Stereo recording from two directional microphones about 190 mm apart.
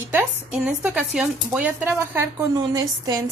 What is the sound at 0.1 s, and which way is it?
A woman's voice, 10° right (ahead or behind).